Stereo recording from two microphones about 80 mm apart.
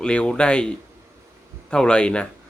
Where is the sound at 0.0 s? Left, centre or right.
Centre.